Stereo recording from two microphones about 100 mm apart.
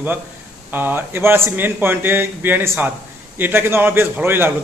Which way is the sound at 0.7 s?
20° right (ahead or behind).